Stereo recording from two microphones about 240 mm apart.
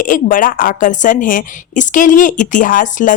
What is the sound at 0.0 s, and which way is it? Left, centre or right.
A woman's voice, left.